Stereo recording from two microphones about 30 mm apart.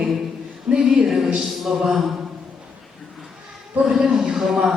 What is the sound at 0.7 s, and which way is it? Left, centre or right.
Music, right.